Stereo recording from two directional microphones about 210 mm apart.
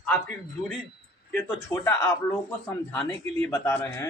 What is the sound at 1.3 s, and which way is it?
A man's voice, 10° left (ahead or behind).